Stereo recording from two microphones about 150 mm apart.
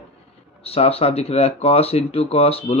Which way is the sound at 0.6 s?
40° left (ahead or behind).